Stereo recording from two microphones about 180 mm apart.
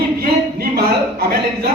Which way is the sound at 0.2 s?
55° right (ahead or behind).